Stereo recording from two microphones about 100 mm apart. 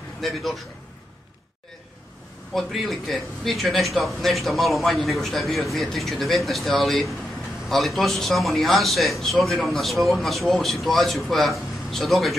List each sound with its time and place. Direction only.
0.2 s a man's voice: centre (ahead or behind)
2.5 s a man's voice: centre (ahead or behind)